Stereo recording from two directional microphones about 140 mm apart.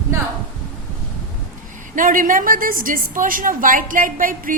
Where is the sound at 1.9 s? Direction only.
75° right (ahead or behind).